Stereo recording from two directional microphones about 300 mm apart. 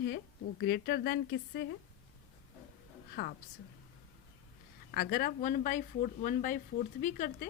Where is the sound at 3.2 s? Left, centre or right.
Left.